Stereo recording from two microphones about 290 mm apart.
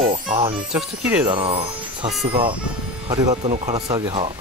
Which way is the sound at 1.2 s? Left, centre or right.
Centre.